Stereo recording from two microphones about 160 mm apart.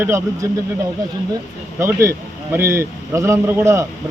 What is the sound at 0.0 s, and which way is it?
Speech, 15° right (ahead or behind).